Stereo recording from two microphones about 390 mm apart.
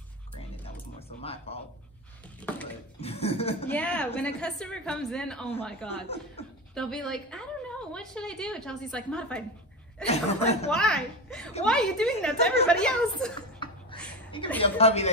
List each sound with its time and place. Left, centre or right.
0.7 s a sound: centre
3.0 s a woman's voice: centre
3.7 s a woman's voice: centre
6.0 s a woman's voice: centre
6.7 s a woman's voice: centre
10.0 s a woman's voice: centre
10.7 s a woman's voice: centre
12.6 s a sound: centre
14.3 s a woman's voice: centre